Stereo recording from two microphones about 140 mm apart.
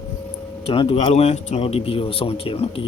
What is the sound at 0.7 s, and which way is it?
A man's voice, 50° left (ahead or behind).